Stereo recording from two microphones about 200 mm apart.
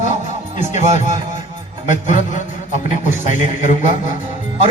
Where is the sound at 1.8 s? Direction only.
40° left (ahead or behind).